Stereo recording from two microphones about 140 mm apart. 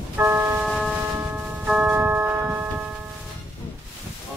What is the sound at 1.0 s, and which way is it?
Tubular bells, 15° right (ahead or behind).